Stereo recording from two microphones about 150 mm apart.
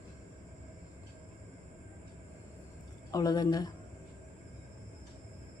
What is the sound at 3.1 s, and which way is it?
Speech, 25° left (ahead or behind).